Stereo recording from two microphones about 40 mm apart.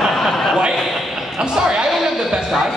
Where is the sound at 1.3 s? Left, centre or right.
Centre.